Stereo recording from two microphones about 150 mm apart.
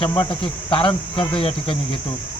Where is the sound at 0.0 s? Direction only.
35° left (ahead or behind).